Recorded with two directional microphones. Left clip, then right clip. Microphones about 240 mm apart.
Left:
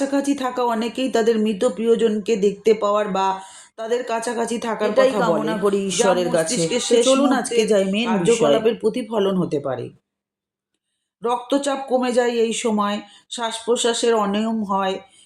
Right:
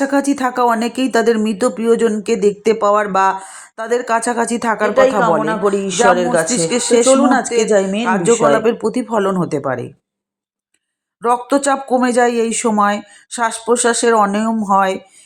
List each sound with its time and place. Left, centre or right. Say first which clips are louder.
0.0 s speech: right 6 dB; right
5.4 s speech: right 4 dB; centre
6.6 s speech: right 4 dB; right
7.0 s speech: right 5 dB; centre
8.0 s speech: right 4 dB; right
11.2 s speech: right 6 dB; right